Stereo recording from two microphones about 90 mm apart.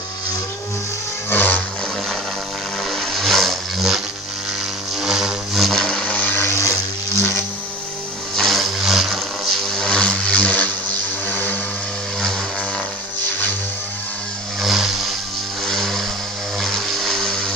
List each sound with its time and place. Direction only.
1.3 s music: 20° left (ahead or behind)
2.9 s vehicle: centre (ahead or behind)
5.0 s vehicle: 5° right (ahead or behind); by 6.7 s 30° left (ahead or behind)
7.2 s music: 30° left (ahead or behind)
8.4 s vehicle: centre (ahead or behind); by 10.7 s 15° left (ahead or behind)
11.3 s a sound: 20° left (ahead or behind)
14.6 s vehicle: 5° right (ahead or behind)
15.6 s a sound: centre (ahead or behind)
16.6 s vehicle: centre (ahead or behind)